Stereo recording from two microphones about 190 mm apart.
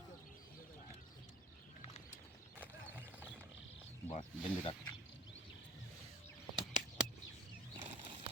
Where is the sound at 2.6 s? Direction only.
10° right (ahead or behind).